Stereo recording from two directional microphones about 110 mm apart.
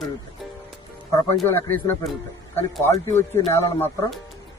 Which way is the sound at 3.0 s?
25° left (ahead or behind).